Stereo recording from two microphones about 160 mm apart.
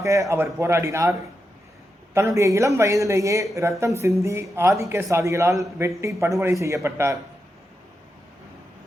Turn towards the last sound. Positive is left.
turn(degrees=-15)  # may be behind; listen again after turning